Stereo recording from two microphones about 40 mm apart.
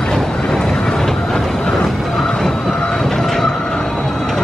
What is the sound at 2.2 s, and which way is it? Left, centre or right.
Music, centre.